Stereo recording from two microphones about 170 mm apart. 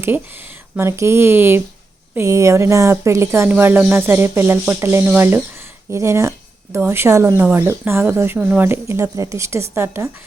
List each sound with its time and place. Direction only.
0.8 s speech: 15° right (ahead or behind)